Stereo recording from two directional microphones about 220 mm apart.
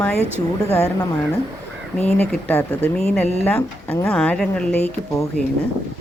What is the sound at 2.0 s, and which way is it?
A woman's voice, 5° left (ahead or behind).